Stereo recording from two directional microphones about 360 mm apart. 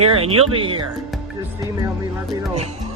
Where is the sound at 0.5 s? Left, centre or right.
Centre.